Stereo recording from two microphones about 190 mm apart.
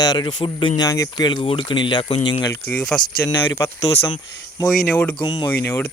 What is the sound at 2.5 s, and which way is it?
Speech, 5° left (ahead or behind).